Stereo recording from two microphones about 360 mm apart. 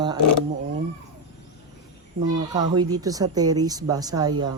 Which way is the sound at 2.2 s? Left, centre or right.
Right.